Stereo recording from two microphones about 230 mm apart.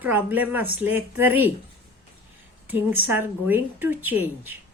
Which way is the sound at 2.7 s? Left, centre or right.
Centre.